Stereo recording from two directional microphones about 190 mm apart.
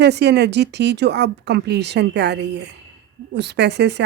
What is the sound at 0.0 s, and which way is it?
A woman's voice, 60° right (ahead or behind).